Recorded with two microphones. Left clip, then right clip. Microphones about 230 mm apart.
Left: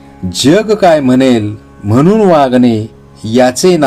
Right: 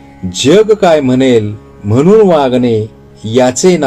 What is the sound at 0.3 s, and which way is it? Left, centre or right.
Speech, left.